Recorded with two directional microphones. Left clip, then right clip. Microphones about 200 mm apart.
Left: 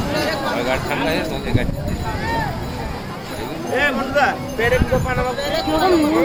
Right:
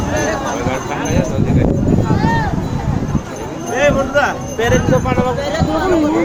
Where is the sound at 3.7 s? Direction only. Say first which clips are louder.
Right 5 dB; 45° right (ahead or behind).